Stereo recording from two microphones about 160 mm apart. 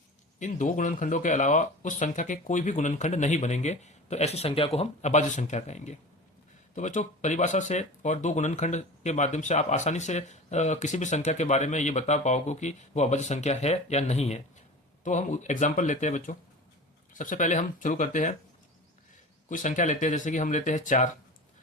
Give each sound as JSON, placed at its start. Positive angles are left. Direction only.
{"t": 0.3, "sound": "speech", "side_deg": 55}
{"t": 19.5, "sound": "speech", "side_deg": 50}